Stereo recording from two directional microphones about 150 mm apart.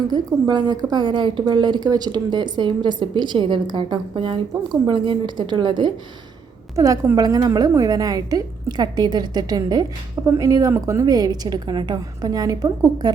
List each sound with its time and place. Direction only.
0.1 s a woman's voice: 30° right (ahead or behind)
6.7 s a woman's voice: 20° right (ahead or behind)